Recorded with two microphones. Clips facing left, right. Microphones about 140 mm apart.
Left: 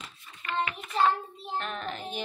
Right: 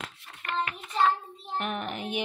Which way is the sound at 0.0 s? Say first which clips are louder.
Right 3 dB; 70° right (ahead or behind).